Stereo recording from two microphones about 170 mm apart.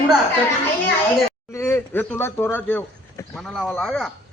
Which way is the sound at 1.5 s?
15° left (ahead or behind).